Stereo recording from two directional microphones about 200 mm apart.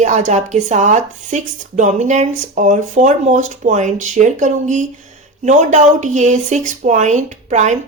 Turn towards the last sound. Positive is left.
turn(degrees=-35)  # may be behind; listen again after turning